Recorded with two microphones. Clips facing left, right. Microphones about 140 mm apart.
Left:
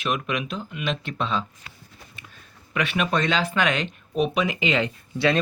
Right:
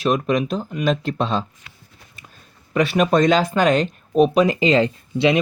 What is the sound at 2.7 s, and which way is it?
Speech, 40° right (ahead or behind).